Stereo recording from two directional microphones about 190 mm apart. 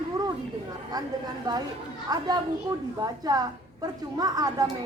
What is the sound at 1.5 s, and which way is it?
Speech, 20° right (ahead or behind).